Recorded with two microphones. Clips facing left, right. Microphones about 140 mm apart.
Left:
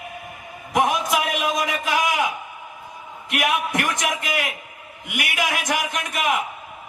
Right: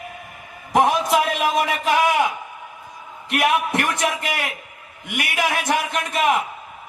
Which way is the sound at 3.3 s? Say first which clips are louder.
Right 3 dB; 30° right (ahead or behind).